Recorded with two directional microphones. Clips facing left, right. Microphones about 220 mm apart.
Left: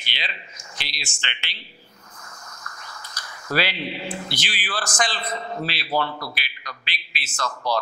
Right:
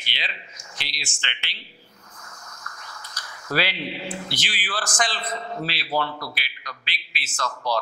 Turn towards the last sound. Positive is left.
turn(degrees=10)  # may be behind; listen again after turning